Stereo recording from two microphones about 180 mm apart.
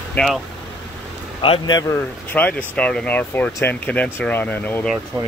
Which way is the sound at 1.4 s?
25° left (ahead or behind).